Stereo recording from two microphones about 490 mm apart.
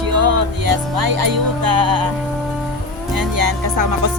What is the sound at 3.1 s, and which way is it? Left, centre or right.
Music, right.